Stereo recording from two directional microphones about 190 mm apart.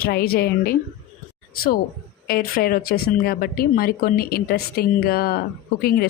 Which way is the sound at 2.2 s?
50° left (ahead or behind).